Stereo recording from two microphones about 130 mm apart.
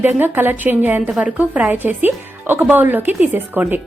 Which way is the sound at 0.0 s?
15° right (ahead or behind).